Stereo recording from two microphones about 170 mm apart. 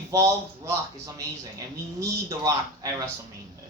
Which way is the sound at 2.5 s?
20° right (ahead or behind).